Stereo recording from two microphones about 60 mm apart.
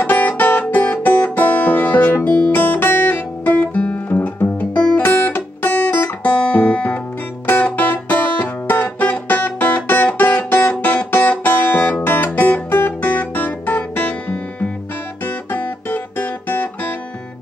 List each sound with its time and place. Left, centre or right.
0.0 s music: left
2.3 s guitar: left
7.6 s music: left